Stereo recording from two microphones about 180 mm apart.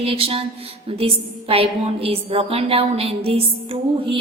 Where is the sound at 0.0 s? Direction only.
30° right (ahead or behind).